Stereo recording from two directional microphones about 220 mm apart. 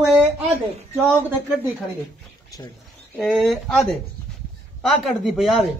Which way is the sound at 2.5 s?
15° left (ahead or behind).